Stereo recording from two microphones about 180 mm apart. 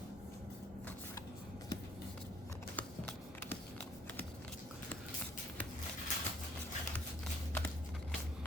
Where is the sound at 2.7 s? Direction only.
10° left (ahead or behind).